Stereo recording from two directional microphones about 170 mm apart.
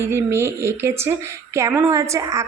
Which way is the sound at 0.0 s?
15° right (ahead or behind).